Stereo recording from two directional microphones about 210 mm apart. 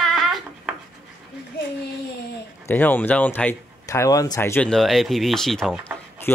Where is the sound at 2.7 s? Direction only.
10° left (ahead or behind).